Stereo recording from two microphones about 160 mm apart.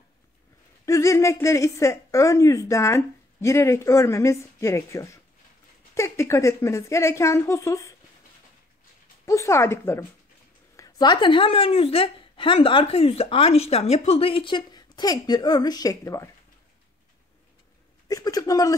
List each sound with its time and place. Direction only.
0.8 s a woman's voice: 20° left (ahead or behind)
9.2 s a woman's voice: 20° left (ahead or behind)
10.8 s a woman's voice: 25° left (ahead or behind)
18.0 s speech: 25° left (ahead or behind)